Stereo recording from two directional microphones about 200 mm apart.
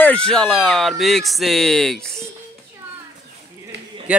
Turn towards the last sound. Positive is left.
turn(degrees=-5)  # may be behind; listen again after turning